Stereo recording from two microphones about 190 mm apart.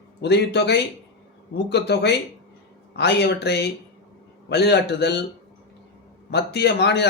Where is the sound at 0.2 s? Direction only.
60° left (ahead or behind).